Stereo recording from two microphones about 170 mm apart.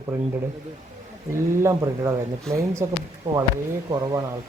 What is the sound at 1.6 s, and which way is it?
Speech, 20° right (ahead or behind).